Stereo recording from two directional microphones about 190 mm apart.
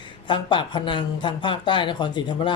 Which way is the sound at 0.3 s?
25° left (ahead or behind).